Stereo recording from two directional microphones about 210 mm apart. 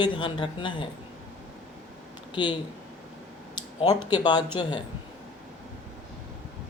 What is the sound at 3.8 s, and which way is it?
Speech, 20° left (ahead or behind).